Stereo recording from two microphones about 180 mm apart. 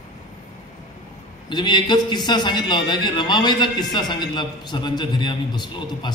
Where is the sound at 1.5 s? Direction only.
25° left (ahead or behind).